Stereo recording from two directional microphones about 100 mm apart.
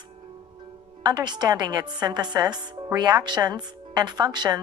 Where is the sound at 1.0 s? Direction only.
45° right (ahead or behind).